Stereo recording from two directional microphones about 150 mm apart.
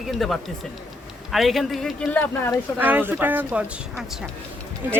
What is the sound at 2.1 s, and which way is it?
Speech, 15° left (ahead or behind).